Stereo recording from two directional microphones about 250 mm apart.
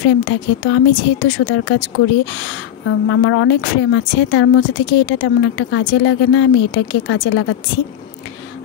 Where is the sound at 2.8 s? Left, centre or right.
Left.